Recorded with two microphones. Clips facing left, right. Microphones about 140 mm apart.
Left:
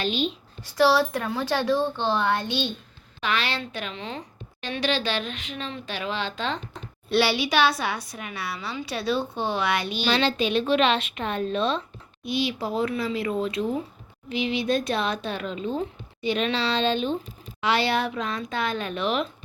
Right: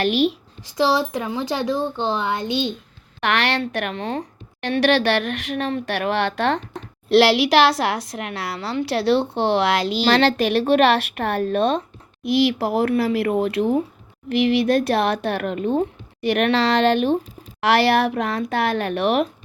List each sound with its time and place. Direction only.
0.0 s speech: 80° right
0.8 s speech: 20° right (ahead or behind)
3.2 s speech: 80° right; by 4.3 s 50° right (ahead or behind)
4.6 s speech: 75° right (ahead or behind)
7.1 s a woman's voice: 90° right; by 11.8 s 55° right (ahead or behind)
12.2 s speech: 85° right; by 19.3 s 60° right (ahead or behind)